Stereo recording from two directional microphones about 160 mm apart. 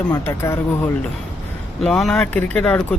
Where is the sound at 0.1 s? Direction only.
15° left (ahead or behind).